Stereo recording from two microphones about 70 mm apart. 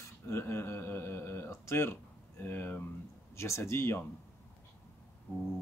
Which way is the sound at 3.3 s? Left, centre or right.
Left.